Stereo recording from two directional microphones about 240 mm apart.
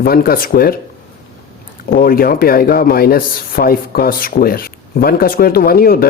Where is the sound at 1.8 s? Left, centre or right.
Left.